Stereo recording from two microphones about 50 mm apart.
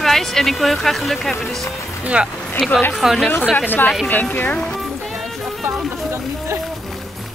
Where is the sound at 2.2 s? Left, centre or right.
Right.